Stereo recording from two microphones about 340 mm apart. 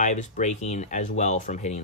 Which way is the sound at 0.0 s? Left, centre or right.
Left.